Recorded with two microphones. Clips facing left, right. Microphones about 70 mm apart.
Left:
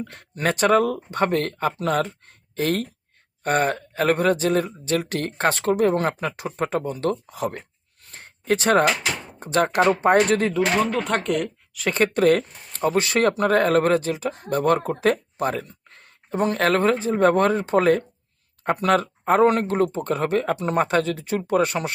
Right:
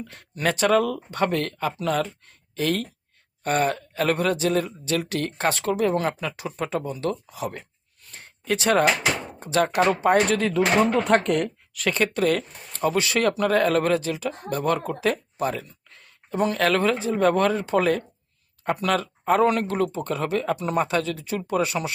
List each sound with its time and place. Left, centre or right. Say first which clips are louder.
0.0 s speech: left 1 dB; left
10.8 s speech: right 3 dB; centre
11.9 s speech: left 4 dB; left